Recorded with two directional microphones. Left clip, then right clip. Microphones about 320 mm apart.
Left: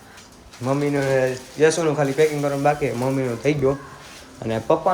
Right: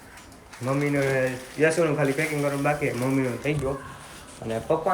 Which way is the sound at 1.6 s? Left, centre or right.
Left.